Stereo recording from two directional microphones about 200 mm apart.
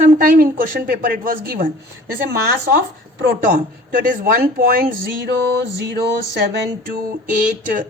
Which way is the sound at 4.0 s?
40° right (ahead or behind).